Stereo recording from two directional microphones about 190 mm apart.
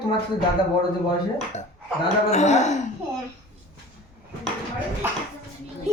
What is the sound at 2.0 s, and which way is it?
Speech, 35° left (ahead or behind).